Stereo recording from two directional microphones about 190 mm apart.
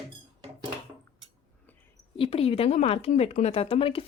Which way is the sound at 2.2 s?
30° left (ahead or behind).